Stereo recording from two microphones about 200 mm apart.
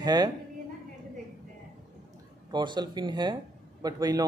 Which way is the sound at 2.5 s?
20° right (ahead or behind).